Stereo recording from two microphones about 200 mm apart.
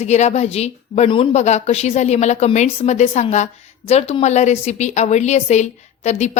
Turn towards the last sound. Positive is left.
turn(degrees=35)  # may be behind; listen again after turning